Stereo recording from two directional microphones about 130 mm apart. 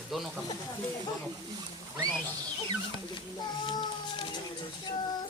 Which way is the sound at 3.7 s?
35° left (ahead or behind).